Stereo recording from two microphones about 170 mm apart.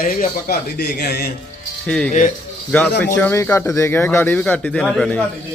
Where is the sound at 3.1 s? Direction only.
15° left (ahead or behind).